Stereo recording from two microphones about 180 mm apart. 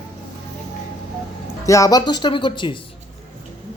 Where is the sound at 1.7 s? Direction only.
20° left (ahead or behind).